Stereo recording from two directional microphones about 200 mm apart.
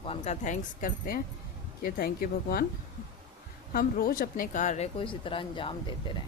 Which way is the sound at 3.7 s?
45° left (ahead or behind).